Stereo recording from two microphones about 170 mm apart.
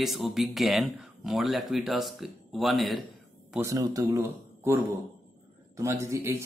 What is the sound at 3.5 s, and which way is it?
A man's voice, 15° right (ahead or behind).